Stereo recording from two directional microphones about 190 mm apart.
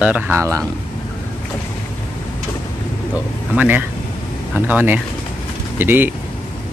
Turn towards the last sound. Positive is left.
turn(degrees=-10)  # may be behind; listen again after turning